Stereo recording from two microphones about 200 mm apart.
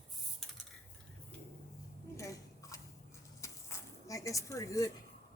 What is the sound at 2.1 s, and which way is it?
Scissors, 15° left (ahead or behind).